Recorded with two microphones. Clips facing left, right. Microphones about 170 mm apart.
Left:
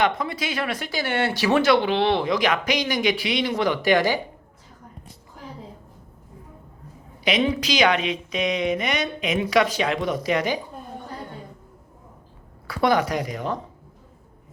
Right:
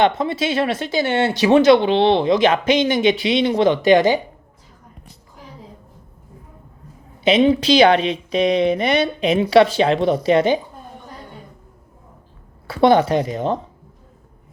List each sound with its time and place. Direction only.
0.0 s speech: 25° right (ahead or behind)
7.3 s speech: 25° right (ahead or behind)
12.6 s speech: 25° right (ahead or behind)